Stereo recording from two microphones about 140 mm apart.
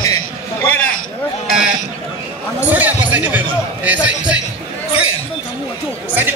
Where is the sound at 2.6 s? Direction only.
10° right (ahead or behind).